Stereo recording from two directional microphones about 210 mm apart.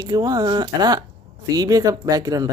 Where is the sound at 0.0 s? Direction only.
20° right (ahead or behind).